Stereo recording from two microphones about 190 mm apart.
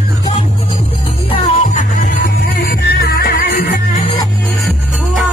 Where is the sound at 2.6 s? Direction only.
55° left (ahead or behind).